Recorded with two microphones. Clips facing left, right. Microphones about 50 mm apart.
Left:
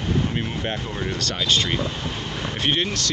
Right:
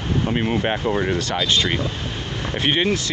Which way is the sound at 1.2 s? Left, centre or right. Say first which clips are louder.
Right 2 dB; centre.